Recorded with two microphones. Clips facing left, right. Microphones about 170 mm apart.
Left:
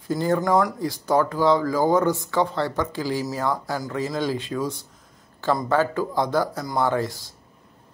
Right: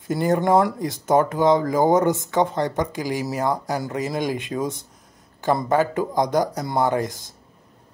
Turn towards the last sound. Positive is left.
turn(degrees=-20)  # may be behind; listen again after turning